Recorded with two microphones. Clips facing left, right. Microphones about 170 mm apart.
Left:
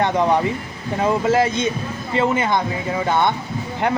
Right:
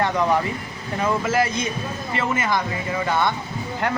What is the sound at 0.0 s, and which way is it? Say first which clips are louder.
A man's voice: left 3 dB; 20° left (ahead or behind).